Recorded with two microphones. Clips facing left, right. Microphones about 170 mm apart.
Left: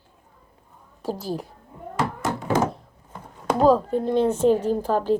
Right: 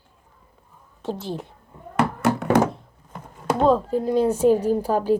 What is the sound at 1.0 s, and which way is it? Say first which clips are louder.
Speech: left 1 dB; centre (ahead or behind).